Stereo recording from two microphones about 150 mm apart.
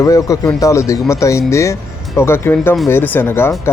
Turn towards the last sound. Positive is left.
turn(degrees=15)  # may be behind; listen again after turning